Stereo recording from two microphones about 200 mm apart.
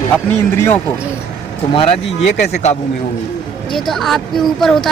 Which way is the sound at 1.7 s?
30° left (ahead or behind).